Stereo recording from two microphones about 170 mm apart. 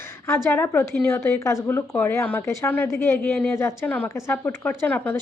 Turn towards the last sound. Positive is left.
turn(degrees=10)  # may be behind; listen again after turning